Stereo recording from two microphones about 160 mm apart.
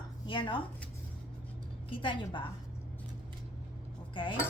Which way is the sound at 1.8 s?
30° left (ahead or behind).